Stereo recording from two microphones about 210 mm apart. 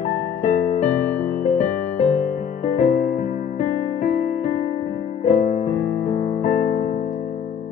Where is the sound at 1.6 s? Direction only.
30° left (ahead or behind).